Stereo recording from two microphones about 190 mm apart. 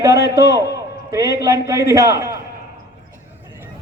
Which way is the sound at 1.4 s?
15° right (ahead or behind).